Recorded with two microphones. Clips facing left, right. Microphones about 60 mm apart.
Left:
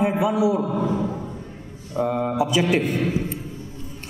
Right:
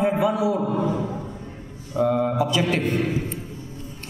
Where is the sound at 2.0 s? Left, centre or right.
Centre.